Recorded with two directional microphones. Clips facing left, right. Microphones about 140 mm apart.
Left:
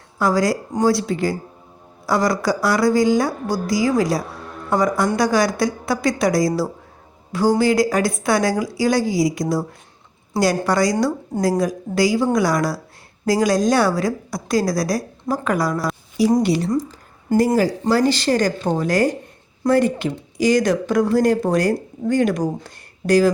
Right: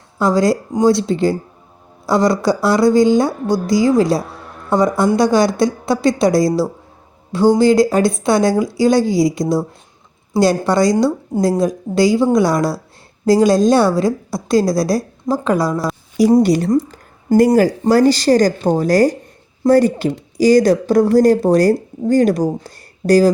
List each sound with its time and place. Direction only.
0.2 s a woman's voice: 25° right (ahead or behind)
7.6 s a woman's voice: 30° right (ahead or behind)
16.4 s speech: 45° right (ahead or behind)